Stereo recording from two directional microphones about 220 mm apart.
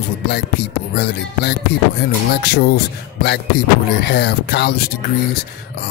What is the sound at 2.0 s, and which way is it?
A man's voice, 45° left (ahead or behind).